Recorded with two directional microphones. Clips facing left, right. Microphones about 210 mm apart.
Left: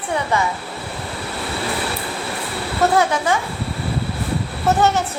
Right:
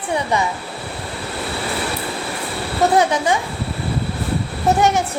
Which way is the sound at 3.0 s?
20° right (ahead or behind).